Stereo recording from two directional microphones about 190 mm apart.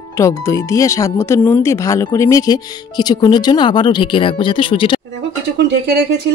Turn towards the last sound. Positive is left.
turn(degrees=-60)  # may be behind; listen again after turning